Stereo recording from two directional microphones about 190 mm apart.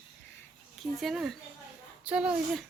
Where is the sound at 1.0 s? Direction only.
Centre (ahead or behind).